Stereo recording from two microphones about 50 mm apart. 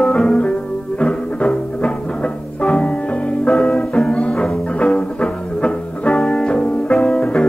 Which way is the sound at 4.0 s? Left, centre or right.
Left.